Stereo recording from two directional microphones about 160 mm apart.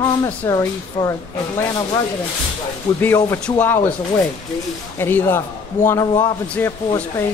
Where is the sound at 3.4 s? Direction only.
10° left (ahead or behind).